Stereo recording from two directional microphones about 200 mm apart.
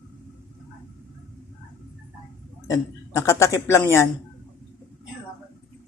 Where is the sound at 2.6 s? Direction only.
15° left (ahead or behind).